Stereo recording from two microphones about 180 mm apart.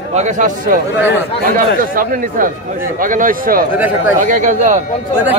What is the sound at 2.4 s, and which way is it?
A man's voice, 50° right (ahead or behind).